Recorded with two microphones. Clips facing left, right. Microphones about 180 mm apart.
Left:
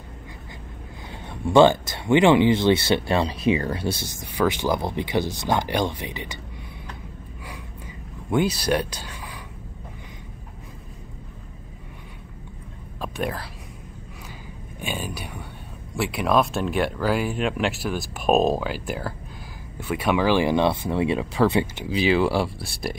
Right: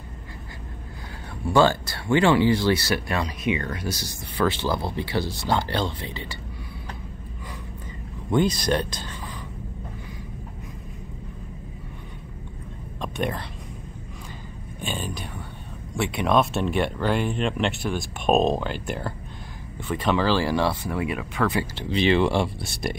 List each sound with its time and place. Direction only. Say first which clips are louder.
1.4 s speech: left 4 dB; 20° left (ahead or behind)
4.4 s speech: left 2 dB; 15° left (ahead or behind)
8.3 s speech: even; 10° left (ahead or behind)
13.0 s whispering: even; 5° left (ahead or behind)
14.8 s speech: even; 10° left (ahead or behind); by 21.6 s 25° left (ahead or behind)
21.7 s speech: even; 5° left (ahead or behind)